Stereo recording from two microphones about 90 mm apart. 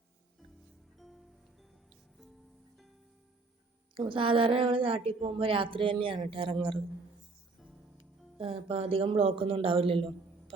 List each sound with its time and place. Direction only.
0.9 s music: centre (ahead or behind)
3.9 s a woman's voice: 75° right (ahead or behind)
8.4 s a man's voice: 85° right